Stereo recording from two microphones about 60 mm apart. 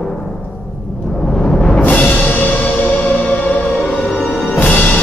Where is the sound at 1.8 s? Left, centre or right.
Left.